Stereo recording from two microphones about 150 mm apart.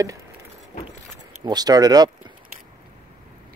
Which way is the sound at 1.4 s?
25° right (ahead or behind).